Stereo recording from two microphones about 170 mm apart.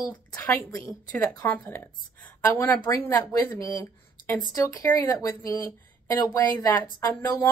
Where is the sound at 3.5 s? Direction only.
20° left (ahead or behind).